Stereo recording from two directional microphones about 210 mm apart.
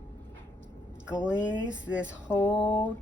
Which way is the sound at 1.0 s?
5° right (ahead or behind).